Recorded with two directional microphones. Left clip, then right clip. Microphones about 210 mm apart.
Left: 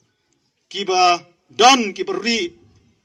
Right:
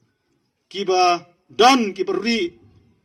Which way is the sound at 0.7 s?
55° right (ahead or behind).